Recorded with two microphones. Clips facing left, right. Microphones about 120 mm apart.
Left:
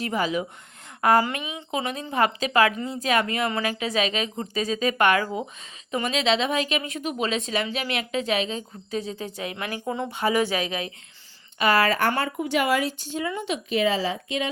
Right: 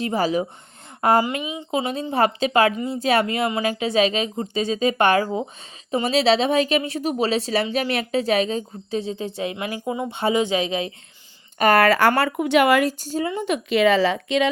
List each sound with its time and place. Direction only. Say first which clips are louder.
0.0 s a woman's voice: right 4 dB; 30° right (ahead or behind)
8.9 s a woman's voice: right 4 dB; 30° right (ahead or behind)
9.8 s speech: right 2 dB; 10° right (ahead or behind)
10.1 s a woman's voice: right 3 dB; 25° right (ahead or behind)
11.6 s speech: right 4 dB; 50° right (ahead or behind)
11.9 s speech: right 6 dB; 85° right; by 12.9 s 65° right (ahead or behind)
12.9 s speech: right 5 dB; 40° right (ahead or behind)
13.7 s speech: right 6 dB; 70° right (ahead or behind)